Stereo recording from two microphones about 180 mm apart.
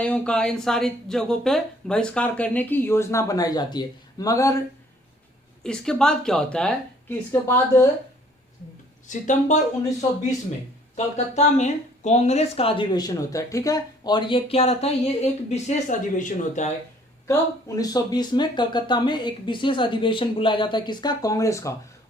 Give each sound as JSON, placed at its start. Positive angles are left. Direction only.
{"t": 0.0, "sound": "speech", "side_deg": 5}
{"t": 5.6, "sound": "speech", "side_deg": 5}
{"t": 9.0, "sound": "speech", "side_deg": 40}
{"t": 10.9, "sound": "speech", "side_deg": 40}
{"t": 17.7, "sound": "a woman's voice", "side_deg": 20}